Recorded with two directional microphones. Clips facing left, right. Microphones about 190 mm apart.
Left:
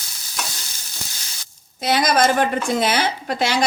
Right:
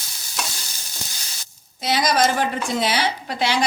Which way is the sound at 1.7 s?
55° left (ahead or behind).